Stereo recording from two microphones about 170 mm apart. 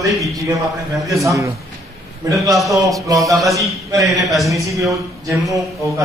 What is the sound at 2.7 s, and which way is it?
Speech, 20° right (ahead or behind).